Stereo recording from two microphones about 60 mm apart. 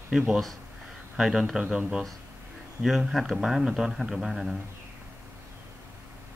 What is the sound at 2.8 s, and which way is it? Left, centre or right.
Speech, centre.